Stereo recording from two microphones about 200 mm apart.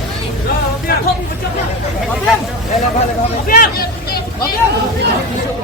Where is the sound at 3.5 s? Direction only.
45° left (ahead or behind).